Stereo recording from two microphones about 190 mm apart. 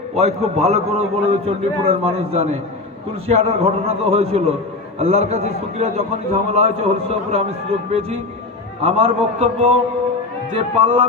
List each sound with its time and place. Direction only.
0.2 s a man's voice: 35° right (ahead or behind)